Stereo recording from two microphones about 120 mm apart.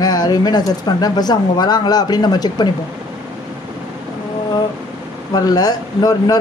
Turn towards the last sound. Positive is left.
turn(degrees=30)  # may be behind; listen again after turning